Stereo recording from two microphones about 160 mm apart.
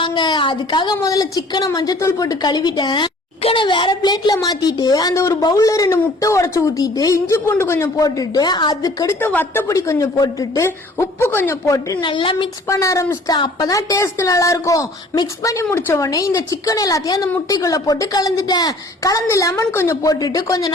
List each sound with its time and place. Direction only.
0.0 s a woman's voice: 25° left (ahead or behind)
12.6 s a woman's voice: 20° left (ahead or behind)